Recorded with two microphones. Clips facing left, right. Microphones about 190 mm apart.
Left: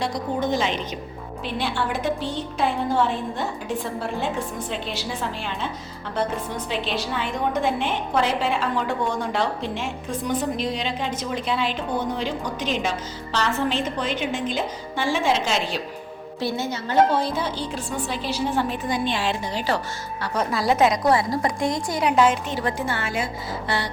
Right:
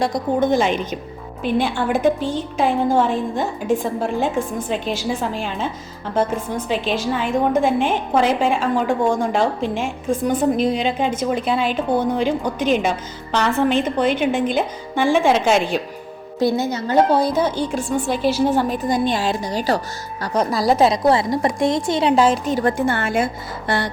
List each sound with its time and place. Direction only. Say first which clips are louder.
0.0 s a woman's voice: right 6 dB; 50° right (ahead or behind)
16.4 s a woman's voice: right 8 dB; 15° right (ahead or behind)
16.7 s a woman's voice: even; 40° right (ahead or behind)